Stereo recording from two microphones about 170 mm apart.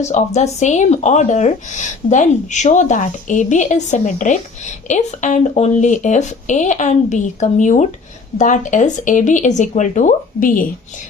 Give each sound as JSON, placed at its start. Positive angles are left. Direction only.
{"t": 0.0, "sound": "speech", "side_deg": 40}